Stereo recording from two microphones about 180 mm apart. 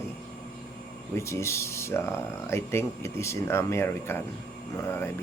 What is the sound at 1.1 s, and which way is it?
Speech, 15° left (ahead or behind).